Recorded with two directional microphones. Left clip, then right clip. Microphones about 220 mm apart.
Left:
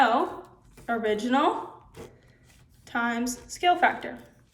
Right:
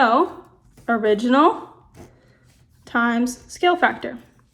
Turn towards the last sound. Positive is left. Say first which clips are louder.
# right 4 dB
turn(degrees=-20)  # may be behind; listen again after turning